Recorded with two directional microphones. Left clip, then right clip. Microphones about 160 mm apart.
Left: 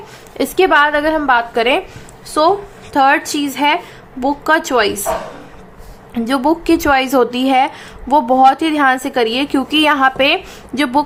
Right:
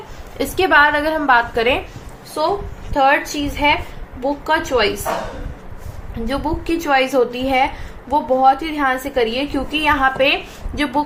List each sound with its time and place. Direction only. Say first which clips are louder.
0.3 s a woman's voice: left 2 dB; 35° left (ahead or behind)
2.9 s a woman's voice: left 3 dB; 65° left (ahead or behind)
6.2 s a woman's voice: left 7 dB; 55° left (ahead or behind)